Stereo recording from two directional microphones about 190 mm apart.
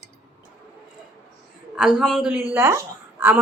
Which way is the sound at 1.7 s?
5° right (ahead or behind).